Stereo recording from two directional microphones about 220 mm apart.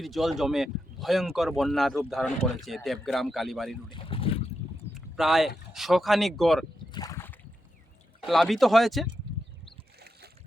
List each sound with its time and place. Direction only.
0.0 s speech: centre (ahead or behind)
3.8 s speech: 25° left (ahead or behind)
4.9 s a sound: centre (ahead or behind)
5.7 s speech: centre (ahead or behind)
6.9 s a sound: 15° left (ahead or behind)
8.3 s speech: centre (ahead or behind)